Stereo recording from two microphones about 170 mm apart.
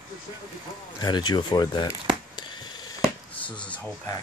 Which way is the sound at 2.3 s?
25° left (ahead or behind).